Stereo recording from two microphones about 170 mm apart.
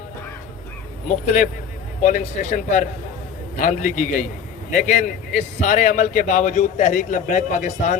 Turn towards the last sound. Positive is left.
turn(degrees=45)  # may be behind; listen again after turning